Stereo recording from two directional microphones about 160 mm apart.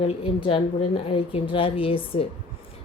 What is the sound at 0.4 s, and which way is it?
A woman's voice, 35° left (ahead or behind).